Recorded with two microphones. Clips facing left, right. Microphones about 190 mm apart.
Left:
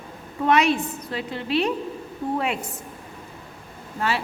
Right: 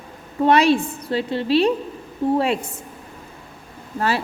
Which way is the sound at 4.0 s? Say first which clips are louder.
Right 4 dB; 40° right (ahead or behind).